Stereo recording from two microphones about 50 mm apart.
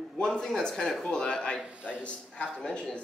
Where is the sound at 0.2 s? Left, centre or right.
Centre.